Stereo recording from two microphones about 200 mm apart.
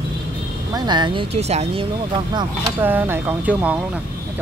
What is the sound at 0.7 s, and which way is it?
Speech, 20° right (ahead or behind).